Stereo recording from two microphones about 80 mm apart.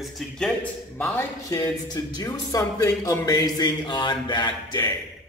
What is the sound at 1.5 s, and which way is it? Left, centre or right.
Speech, left.